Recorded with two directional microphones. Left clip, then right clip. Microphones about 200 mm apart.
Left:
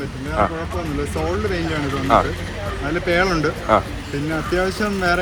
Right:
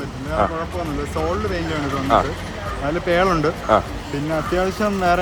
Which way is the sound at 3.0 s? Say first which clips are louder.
Right 1 dB; 15° right (ahead or behind).